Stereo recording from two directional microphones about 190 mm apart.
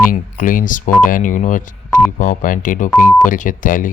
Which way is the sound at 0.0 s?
45° left (ahead or behind).